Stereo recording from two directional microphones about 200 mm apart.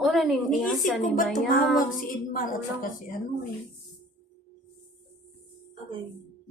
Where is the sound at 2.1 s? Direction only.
45° left (ahead or behind).